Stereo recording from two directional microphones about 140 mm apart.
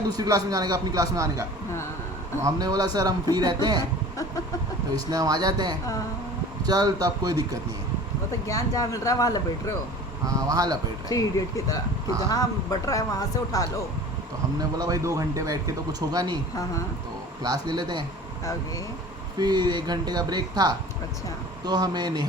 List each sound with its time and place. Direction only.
0.2 s speech: 25° right (ahead or behind)
4.9 s speech: 25° right (ahead or behind)
8.4 s speech: 20° left (ahead or behind)
10.2 s speech: 25° right (ahead or behind)
11.1 s speech: 25° left (ahead or behind)
14.6 s speech: 25° right (ahead or behind)
17.4 s speech: 30° right (ahead or behind)
19.4 s speech: 30° right (ahead or behind)